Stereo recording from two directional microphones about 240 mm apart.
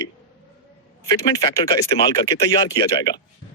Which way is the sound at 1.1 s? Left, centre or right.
Centre.